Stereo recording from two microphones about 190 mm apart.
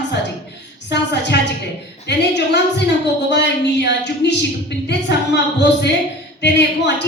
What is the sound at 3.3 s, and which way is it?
A woman's voice, 65° left (ahead or behind).